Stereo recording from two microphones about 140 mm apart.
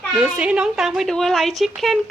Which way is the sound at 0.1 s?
5° right (ahead or behind).